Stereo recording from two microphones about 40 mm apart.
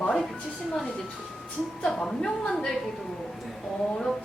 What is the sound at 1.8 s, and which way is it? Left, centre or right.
Female singing, centre.